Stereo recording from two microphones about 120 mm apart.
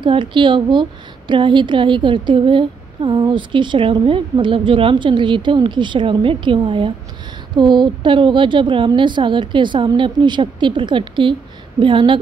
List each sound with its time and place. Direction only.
0.0 s a woman's voice: 45° right (ahead or behind)